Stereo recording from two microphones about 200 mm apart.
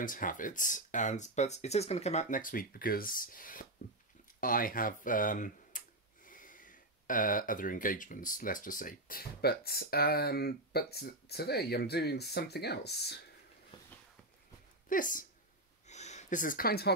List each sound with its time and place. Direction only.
0.0 s speech: 40° left (ahead or behind)
14.9 s speech: 40° left (ahead or behind)
15.9 s a sound: 35° left (ahead or behind); by 16.9 s 50° left (ahead or behind)